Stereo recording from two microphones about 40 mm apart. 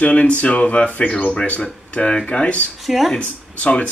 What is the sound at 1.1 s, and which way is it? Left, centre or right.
Speech, left.